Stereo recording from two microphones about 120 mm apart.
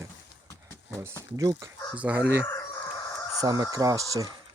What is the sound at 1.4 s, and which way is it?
Speech, 30° right (ahead or behind).